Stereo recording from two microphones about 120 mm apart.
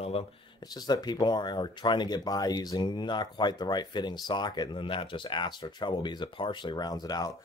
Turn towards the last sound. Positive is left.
turn(degrees=35)  # may be behind; listen again after turning